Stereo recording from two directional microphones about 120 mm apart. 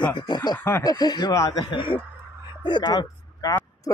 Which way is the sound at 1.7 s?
45° left (ahead or behind).